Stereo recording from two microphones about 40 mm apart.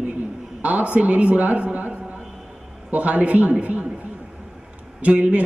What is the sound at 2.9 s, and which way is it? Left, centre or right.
Speech, right.